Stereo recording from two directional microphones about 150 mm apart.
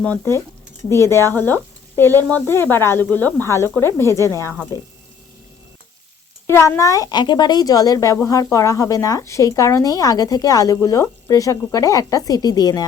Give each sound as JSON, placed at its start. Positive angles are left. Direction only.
{"t": 0.0, "sound": "speech", "side_deg": 15}
{"t": 6.5, "sound": "speech", "side_deg": 15}